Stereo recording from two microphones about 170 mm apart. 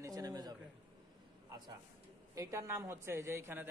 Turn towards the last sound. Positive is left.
turn(degrees=-15)  # may be behind; listen again after turning